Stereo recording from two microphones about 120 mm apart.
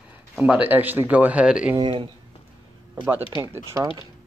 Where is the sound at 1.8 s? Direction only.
45° right (ahead or behind).